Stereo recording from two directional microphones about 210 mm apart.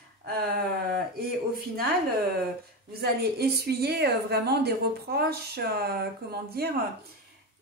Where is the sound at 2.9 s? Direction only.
50° right (ahead or behind).